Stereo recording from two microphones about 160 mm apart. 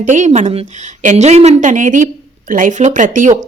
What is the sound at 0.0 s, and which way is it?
Speech, 50° right (ahead or behind).